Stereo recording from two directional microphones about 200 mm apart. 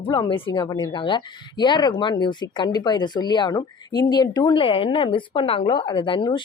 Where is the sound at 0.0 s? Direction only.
25° left (ahead or behind).